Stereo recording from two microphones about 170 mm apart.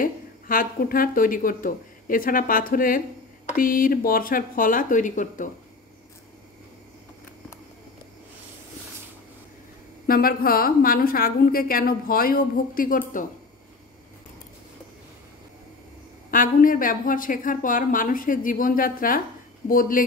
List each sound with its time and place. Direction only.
0.0 s a woman's voice: 55° left (ahead or behind)
10.0 s a woman's voice: 60° left (ahead or behind)
16.3 s a woman's voice: 55° left (ahead or behind)